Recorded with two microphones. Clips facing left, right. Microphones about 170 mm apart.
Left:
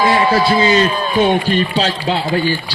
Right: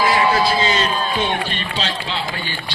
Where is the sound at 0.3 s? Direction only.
60° left (ahead or behind).